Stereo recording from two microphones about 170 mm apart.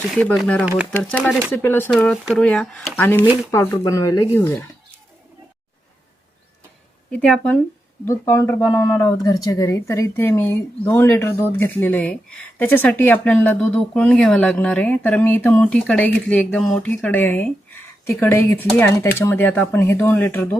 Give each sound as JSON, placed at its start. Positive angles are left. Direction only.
{"t": 0.1, "sound": "speech", "side_deg": 5}
{"t": 0.6, "sound": "speech", "side_deg": -10}
{"t": 0.9, "sound": "speech", "side_deg": 10}
{"t": 7.1, "sound": "speech", "side_deg": 5}